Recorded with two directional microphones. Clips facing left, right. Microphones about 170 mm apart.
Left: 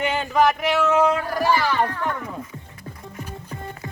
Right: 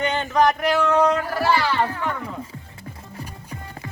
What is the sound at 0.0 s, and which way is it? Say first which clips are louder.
Speech: even; 5° left (ahead or behind).